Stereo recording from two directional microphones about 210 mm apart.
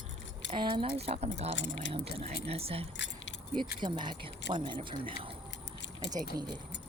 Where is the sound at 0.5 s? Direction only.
25° right (ahead or behind).